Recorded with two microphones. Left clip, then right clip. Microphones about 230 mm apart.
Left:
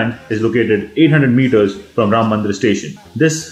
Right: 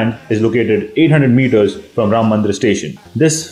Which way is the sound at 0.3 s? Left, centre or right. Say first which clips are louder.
Right 1 dB; right.